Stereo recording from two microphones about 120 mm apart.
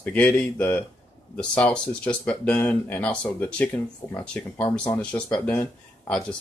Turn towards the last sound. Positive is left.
turn(degrees=10)  # may be behind; listen again after turning